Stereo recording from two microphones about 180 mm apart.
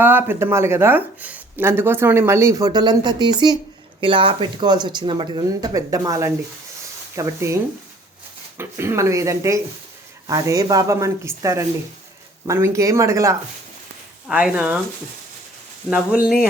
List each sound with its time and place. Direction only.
0.0 s speech: 10° right (ahead or behind)
15.9 s speech: 5° right (ahead or behind)